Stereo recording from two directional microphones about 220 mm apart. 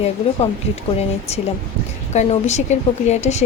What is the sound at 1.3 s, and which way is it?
A woman's voice, 30° left (ahead or behind).